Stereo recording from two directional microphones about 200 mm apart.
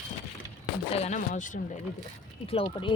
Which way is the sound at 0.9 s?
35° left (ahead or behind).